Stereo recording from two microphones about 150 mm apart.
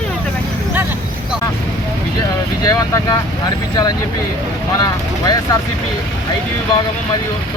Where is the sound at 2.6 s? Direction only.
25° left (ahead or behind).